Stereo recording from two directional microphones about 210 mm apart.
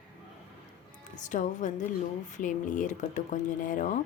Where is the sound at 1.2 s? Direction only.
35° left (ahead or behind).